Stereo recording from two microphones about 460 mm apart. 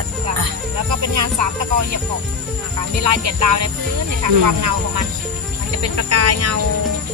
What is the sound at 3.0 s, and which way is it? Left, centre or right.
Speech, right.